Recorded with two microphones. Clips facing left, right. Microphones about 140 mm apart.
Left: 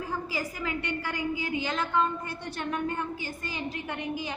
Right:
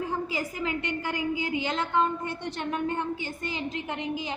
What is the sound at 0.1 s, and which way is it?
A woman's voice, 20° right (ahead or behind).